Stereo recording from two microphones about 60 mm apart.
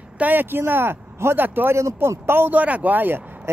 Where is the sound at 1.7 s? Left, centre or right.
Right.